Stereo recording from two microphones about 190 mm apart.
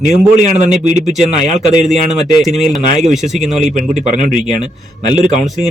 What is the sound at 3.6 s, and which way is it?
Speech, 40° right (ahead or behind).